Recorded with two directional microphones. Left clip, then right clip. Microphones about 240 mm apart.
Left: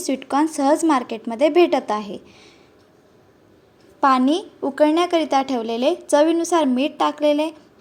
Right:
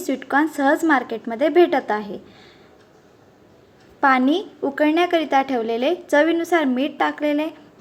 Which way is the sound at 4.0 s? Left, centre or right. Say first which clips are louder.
Even; left.